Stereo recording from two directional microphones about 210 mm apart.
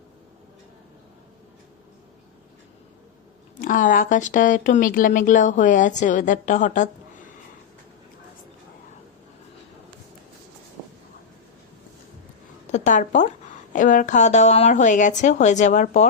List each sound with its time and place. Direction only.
3.6 s speech: 40° left (ahead or behind)
12.7 s speech: 35° left (ahead or behind)